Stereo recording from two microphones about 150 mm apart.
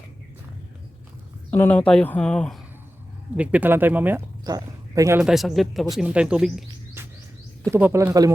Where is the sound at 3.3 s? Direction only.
10° right (ahead or behind).